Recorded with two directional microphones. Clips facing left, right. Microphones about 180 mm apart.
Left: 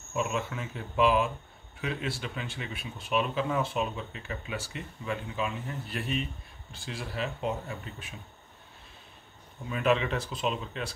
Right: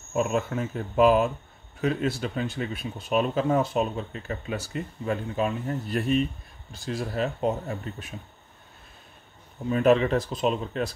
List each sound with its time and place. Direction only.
0.1 s speech: 45° right (ahead or behind)
9.7 s speech: 40° right (ahead or behind)